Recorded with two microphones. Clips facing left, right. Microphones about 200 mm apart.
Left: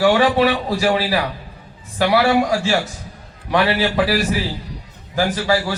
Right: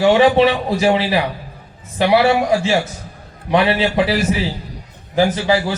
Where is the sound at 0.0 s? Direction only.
20° right (ahead or behind).